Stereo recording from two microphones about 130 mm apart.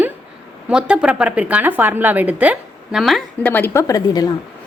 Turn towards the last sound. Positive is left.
turn(degrees=30)  # may be behind; listen again after turning